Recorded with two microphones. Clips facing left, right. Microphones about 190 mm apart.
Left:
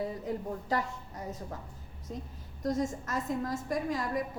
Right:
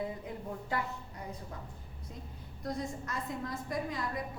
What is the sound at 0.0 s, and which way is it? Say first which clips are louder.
A woman's voice: left 4 dB; 40° left (ahead or behind).